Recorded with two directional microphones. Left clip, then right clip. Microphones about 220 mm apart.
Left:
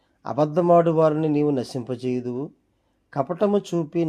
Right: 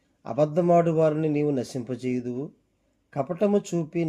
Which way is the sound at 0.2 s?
5° left (ahead or behind).